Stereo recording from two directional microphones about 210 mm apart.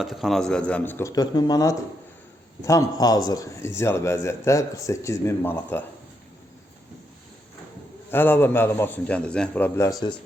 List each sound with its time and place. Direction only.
0.0 s a man's voice: centre (ahead or behind)
8.1 s a man's voice: 10° left (ahead or behind)